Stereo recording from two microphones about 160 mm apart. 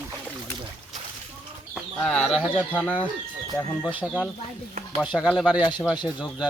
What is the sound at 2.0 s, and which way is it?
Speech, 5° left (ahead or behind).